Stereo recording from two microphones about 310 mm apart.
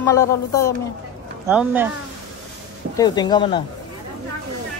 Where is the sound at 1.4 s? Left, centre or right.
Centre.